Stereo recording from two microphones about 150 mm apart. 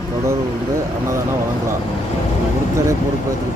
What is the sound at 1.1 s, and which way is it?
Speech, 20° right (ahead or behind).